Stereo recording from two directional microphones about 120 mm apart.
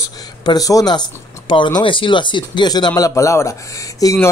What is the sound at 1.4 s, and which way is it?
A man's voice, 45° left (ahead or behind).